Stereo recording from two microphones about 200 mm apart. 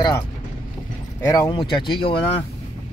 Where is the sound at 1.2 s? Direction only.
15° left (ahead or behind).